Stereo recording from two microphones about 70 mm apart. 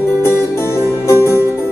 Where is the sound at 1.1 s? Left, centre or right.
Left.